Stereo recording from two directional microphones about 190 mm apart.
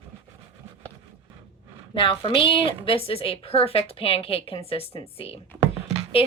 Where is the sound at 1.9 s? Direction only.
25° left (ahead or behind).